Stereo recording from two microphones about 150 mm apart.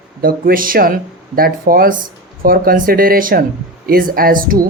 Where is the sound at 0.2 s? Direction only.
75° right (ahead or behind).